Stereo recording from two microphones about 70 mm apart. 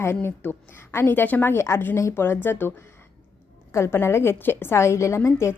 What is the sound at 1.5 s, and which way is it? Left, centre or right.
A woman's voice, left.